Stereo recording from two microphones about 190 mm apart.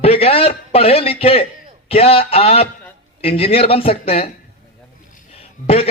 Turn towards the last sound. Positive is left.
turn(degrees=30)  # may be behind; listen again after turning